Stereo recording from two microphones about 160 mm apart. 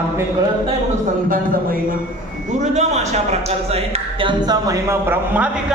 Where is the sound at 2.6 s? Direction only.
45° right (ahead or behind).